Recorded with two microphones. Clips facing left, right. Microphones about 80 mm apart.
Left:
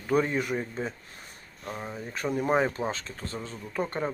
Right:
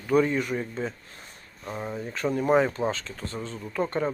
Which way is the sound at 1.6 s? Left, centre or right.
Centre.